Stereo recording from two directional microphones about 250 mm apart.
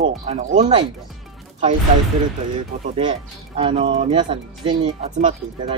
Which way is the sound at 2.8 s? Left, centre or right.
Right.